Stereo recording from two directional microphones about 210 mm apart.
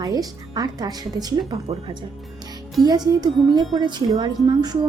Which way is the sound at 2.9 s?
20° right (ahead or behind).